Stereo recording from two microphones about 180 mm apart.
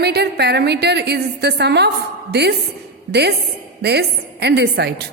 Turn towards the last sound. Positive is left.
turn(degrees=-65)  # may be behind; listen again after turning